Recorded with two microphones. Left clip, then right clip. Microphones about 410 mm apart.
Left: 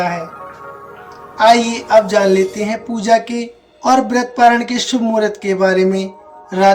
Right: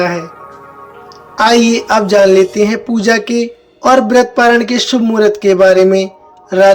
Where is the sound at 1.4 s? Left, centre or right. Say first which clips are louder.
Right 1 dB; centre.